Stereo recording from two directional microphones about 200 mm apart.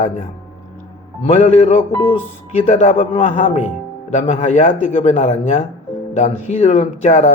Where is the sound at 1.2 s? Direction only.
35° left (ahead or behind).